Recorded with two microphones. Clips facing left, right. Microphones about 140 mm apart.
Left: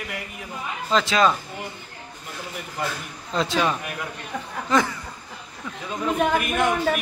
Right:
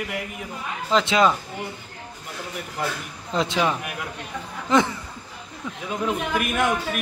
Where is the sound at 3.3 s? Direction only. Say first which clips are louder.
Even; 20° right (ahead or behind).